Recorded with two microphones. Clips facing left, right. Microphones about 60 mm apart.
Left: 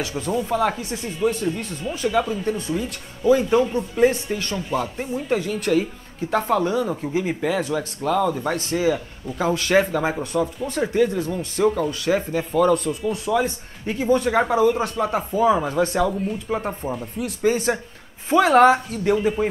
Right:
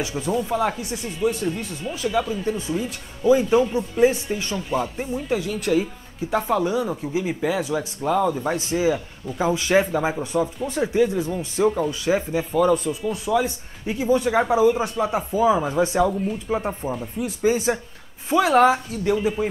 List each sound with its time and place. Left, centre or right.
0.1 s speech: centre
2.4 s speech: centre
4.6 s speech: centre
8.3 s speech: centre
8.5 s speech: centre
16.1 s speech: centre